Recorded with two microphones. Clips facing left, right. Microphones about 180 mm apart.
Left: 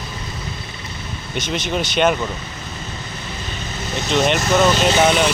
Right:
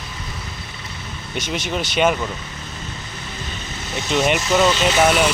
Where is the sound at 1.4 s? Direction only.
5° right (ahead or behind).